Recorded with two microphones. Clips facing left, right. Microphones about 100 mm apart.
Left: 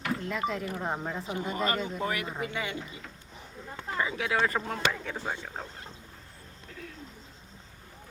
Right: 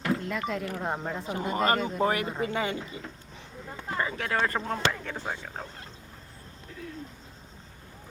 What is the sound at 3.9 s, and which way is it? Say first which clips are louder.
A woman's voice: even; 5° left (ahead or behind).